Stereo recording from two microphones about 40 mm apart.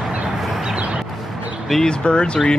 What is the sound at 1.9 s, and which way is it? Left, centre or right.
Speech, left.